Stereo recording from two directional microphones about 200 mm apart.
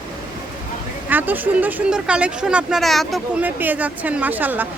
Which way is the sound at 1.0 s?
10° right (ahead or behind).